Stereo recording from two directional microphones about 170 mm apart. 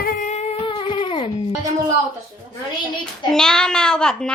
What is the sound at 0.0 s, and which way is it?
Music, 45° left (ahead or behind).